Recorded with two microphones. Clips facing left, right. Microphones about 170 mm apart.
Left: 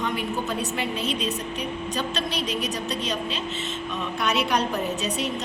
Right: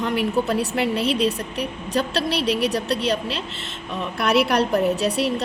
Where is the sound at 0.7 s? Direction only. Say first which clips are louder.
Right 6 dB; 75° right (ahead or behind).